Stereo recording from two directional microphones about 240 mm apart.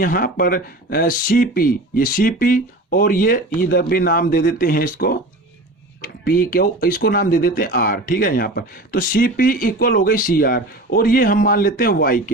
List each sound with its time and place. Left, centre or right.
0.0 s speech: left